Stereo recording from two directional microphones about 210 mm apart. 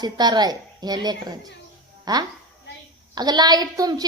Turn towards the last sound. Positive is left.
turn(degrees=-20)  # may be behind; listen again after turning